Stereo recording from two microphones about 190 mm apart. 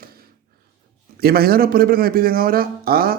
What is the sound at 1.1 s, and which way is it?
A man's voice, 55° right (ahead or behind).